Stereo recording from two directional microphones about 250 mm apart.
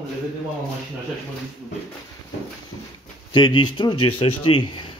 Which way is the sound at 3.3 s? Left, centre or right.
Centre.